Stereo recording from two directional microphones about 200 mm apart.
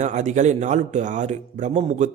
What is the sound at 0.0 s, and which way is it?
Speech, 35° right (ahead or behind).